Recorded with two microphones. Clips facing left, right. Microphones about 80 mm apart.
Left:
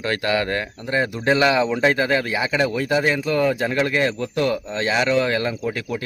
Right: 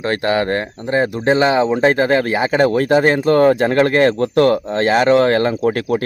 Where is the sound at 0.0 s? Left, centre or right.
Right.